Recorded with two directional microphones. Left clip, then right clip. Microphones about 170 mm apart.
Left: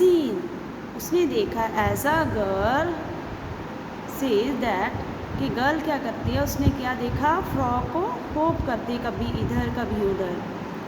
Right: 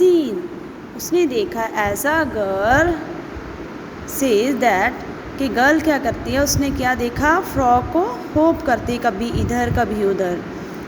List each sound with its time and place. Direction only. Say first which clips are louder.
0.0 s a sound: right 5 dB; 35° right (ahead or behind)
1.1 s speech: right 4 dB; 35° right (ahead or behind)
4.2 s speech: right 8 dB; 35° right (ahead or behind)